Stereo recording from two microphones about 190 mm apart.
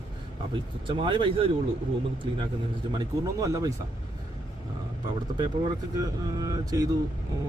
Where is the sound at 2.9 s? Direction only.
20° right (ahead or behind).